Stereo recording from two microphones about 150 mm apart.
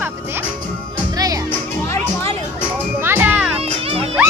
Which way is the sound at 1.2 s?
25° right (ahead or behind).